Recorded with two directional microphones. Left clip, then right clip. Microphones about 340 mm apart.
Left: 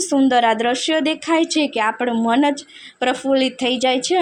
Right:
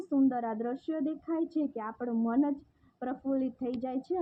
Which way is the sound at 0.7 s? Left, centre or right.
Centre.